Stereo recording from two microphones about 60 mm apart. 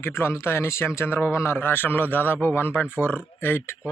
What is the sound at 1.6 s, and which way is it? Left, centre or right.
Speech, left.